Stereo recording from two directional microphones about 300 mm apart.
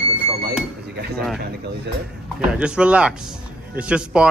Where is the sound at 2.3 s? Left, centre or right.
Centre.